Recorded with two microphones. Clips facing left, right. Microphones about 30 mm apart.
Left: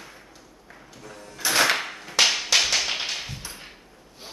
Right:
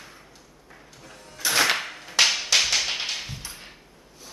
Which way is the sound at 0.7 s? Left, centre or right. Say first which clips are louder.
Left 3 dB; centre.